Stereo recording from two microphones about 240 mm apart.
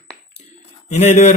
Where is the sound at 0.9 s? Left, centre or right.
Left.